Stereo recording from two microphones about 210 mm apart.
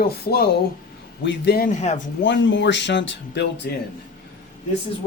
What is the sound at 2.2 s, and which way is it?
Speech, 60° left (ahead or behind).